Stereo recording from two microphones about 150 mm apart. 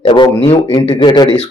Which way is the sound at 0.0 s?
30° left (ahead or behind).